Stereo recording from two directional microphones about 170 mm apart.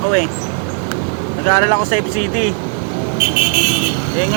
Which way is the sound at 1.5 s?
30° left (ahead or behind).